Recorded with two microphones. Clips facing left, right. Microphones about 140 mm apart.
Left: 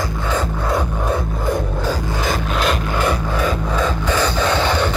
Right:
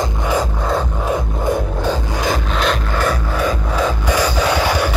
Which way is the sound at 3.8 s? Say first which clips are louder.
Right 2 dB; 15° right (ahead or behind).